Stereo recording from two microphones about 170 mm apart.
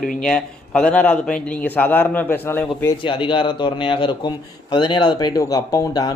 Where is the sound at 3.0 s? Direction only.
30° left (ahead or behind).